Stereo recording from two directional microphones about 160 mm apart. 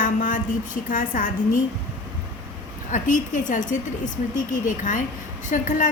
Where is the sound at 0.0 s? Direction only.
55° left (ahead or behind).